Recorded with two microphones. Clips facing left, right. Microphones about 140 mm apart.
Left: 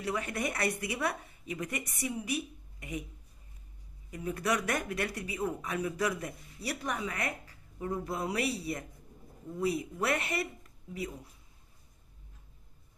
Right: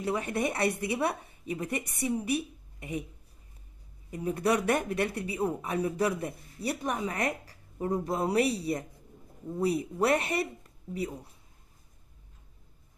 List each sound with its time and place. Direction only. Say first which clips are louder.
0.0 s speech: right 4 dB; 25° right (ahead or behind)
4.1 s speech: right 4 dB; 30° right (ahead or behind)
7.1 s speech: right 5 dB; 35° right (ahead or behind)